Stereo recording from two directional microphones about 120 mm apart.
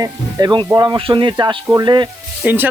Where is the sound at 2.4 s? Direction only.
10° right (ahead or behind).